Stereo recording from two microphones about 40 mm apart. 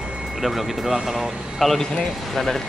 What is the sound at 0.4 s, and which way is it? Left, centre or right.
Speech, centre.